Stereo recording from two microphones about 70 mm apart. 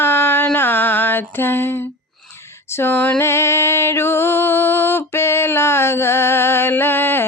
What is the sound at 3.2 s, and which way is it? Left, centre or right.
Music, left.